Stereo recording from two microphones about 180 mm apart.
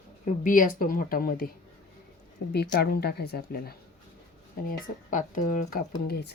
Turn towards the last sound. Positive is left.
turn(degrees=60)  # may be behind; listen again after turning